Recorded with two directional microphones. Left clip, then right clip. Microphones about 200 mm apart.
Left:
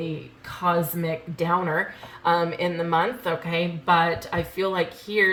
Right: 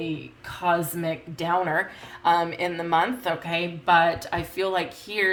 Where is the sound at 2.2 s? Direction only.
50° right (ahead or behind).